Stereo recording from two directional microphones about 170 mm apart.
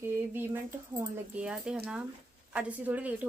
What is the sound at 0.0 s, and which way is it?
Speech, 15° right (ahead or behind).